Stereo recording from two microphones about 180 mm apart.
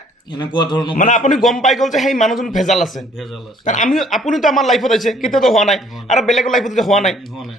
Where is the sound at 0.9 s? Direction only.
45° left (ahead or behind).